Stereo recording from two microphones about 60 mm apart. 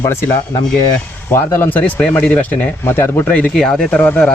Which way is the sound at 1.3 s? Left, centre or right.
Left.